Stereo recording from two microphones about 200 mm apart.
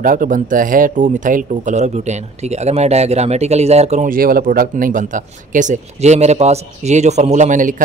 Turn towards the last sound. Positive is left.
turn(degrees=-40)  # may be behind; listen again after turning